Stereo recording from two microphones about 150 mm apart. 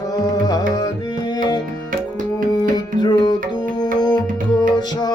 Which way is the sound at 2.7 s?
30° left (ahead or behind).